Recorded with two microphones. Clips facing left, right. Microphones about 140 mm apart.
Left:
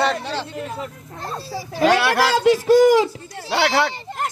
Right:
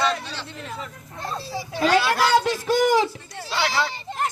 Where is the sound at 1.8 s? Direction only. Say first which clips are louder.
Left 3 dB; 70° left (ahead or behind).